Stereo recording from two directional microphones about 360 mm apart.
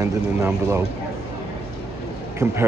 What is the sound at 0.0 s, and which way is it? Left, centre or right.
Speech, centre.